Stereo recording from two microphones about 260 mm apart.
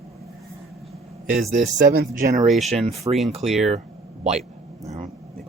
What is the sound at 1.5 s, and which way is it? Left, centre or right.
Speech, right.